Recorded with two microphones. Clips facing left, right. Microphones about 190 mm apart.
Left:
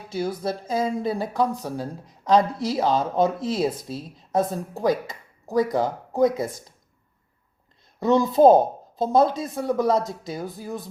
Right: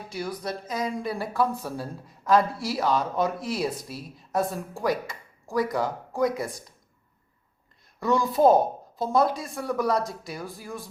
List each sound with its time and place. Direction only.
0.1 s speech: 25° left (ahead or behind)
7.9 s speech: 20° left (ahead or behind)